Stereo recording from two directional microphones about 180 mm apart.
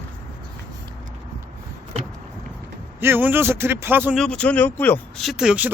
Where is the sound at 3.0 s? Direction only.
10° right (ahead or behind).